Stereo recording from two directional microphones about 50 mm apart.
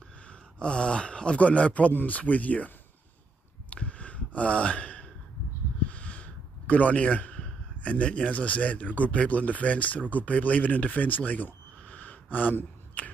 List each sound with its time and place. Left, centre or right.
0.3 s speech: left
3.7 s a sound: left
7.8 s speech: left